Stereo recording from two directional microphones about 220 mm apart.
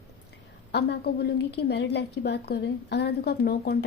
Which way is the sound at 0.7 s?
50° left (ahead or behind).